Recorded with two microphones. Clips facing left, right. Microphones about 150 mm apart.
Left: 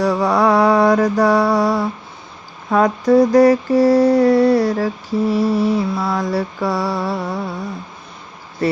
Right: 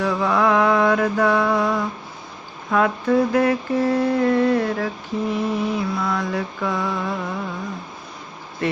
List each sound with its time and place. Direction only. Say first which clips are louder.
0.0 s mantra: left 4 dB; 40° left (ahead or behind)
2.6 s speech: left 4 dB; 40° left (ahead or behind)
3.1 s mantra: left 8 dB; 40° left (ahead or behind)